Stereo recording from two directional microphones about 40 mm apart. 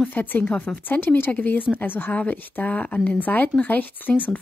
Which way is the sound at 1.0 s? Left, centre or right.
Left.